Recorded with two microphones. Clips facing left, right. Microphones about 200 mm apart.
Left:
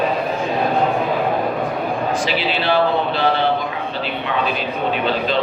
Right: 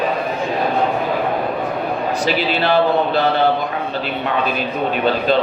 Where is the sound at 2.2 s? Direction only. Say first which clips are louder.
Right 2 dB; 40° right (ahead or behind).